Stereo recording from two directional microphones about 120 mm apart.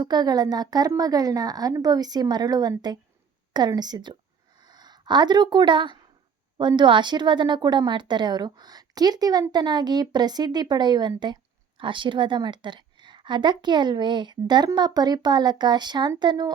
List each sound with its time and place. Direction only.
0.0 s a woman's voice: 35° right (ahead or behind)